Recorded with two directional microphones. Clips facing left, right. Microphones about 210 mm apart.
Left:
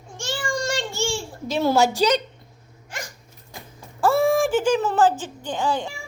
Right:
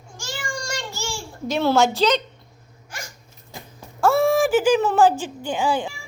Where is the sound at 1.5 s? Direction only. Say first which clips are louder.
Right 1 dB; 5° left (ahead or behind).